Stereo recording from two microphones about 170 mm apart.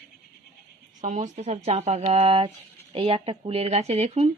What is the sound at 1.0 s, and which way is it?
Speech, 45° right (ahead or behind).